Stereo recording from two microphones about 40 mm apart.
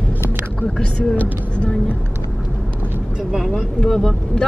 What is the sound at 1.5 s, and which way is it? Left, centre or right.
Vehicle, left.